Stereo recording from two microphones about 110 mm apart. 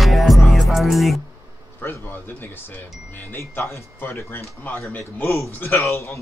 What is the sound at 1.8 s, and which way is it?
A man's voice, 20° left (ahead or behind).